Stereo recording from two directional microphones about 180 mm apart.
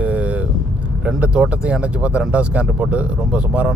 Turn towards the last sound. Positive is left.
turn(degrees=-5)  # may be behind; listen again after turning